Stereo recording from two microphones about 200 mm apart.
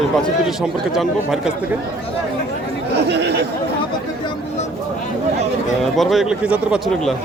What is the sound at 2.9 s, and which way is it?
Speech, 55° right (ahead or behind).